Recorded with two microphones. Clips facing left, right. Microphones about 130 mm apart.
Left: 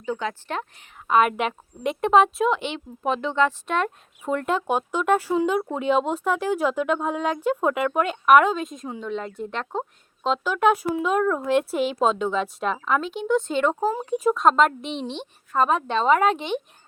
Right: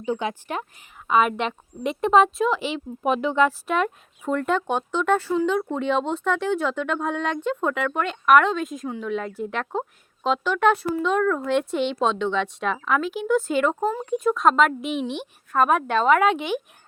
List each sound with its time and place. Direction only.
0.0 s speech: 15° right (ahead or behind)
1.0 s speech: centre (ahead or behind)
15.9 s a woman's voice: 30° left (ahead or behind)